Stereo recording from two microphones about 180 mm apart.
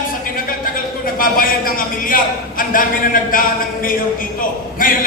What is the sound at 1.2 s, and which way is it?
A man's voice, 50° left (ahead or behind).